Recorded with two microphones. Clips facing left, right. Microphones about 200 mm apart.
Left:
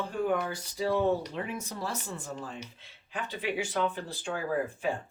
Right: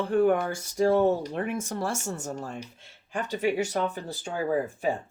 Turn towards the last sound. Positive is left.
turn(degrees=-40)  # may be behind; listen again after turning